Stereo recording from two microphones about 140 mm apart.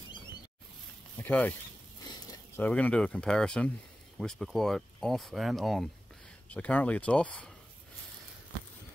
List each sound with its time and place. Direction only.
1.2 s speech: 10° left (ahead or behind)
2.0 s a sound: 25° left (ahead or behind)
2.6 s speech: 10° left (ahead or behind)